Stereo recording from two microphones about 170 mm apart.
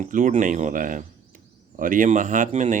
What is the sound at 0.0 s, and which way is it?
Speech, 50° right (ahead or behind).